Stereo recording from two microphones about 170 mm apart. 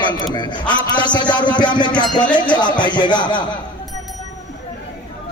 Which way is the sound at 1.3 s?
25° left (ahead or behind).